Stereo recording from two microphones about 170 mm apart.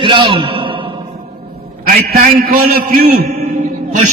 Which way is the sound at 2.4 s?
60° right (ahead or behind).